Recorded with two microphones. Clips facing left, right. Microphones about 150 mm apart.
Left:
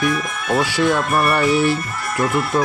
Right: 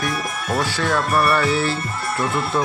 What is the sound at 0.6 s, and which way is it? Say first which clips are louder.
Speech: left 4 dB; 15° left (ahead or behind).